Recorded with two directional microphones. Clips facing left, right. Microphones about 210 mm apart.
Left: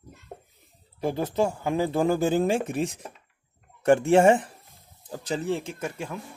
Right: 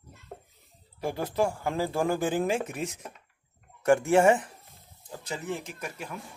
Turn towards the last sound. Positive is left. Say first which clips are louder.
# left 6 dB
turn(degrees=25)  # may be behind; listen again after turning